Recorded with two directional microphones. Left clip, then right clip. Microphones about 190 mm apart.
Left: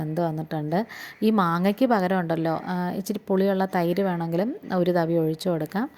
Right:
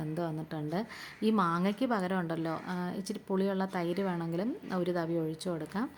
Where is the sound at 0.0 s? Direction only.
30° left (ahead or behind).